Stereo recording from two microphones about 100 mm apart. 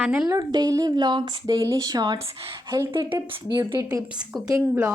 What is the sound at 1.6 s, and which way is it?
Speech, 35° right (ahead or behind).